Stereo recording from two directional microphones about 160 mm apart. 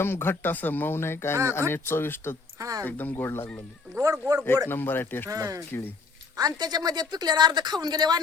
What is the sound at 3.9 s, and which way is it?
Speech, 20° right (ahead or behind).